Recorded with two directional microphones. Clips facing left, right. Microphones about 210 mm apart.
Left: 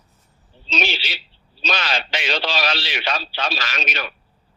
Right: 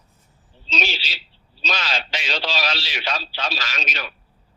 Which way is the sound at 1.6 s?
60° left (ahead or behind).